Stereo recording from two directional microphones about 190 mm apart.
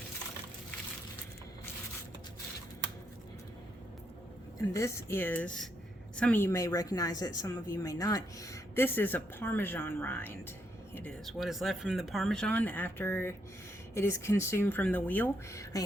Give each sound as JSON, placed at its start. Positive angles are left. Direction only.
{"t": 4.5, "sound": "a woman's voice", "side_deg": 15}